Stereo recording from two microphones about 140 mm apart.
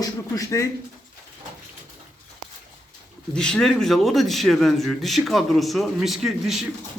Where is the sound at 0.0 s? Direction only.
25° left (ahead or behind).